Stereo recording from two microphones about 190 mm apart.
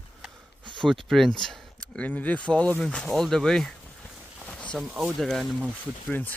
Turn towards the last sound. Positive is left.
turn(degrees=10)  # may be behind; listen again after turning